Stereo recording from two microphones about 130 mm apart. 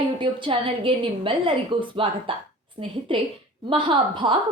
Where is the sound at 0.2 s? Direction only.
40° right (ahead or behind).